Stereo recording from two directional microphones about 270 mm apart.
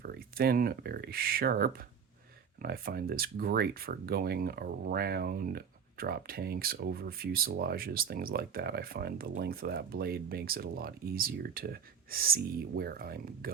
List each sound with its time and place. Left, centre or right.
0.0 s speech: right